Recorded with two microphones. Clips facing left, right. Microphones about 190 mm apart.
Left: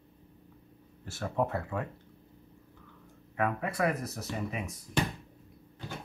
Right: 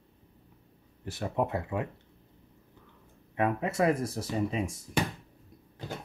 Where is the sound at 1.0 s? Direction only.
15° right (ahead or behind).